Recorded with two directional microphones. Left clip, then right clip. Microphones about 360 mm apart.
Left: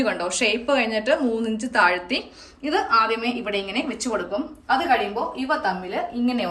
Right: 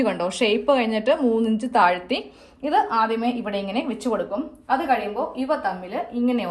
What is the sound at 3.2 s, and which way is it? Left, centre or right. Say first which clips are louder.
Speech: even; centre.